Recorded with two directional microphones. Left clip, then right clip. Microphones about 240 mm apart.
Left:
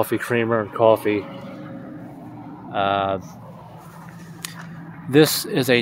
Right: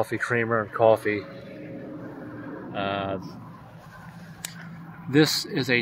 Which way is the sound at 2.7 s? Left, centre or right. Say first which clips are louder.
Left 8 dB; left.